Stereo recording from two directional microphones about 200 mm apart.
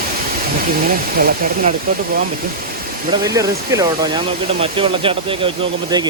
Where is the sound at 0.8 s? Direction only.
45° right (ahead or behind).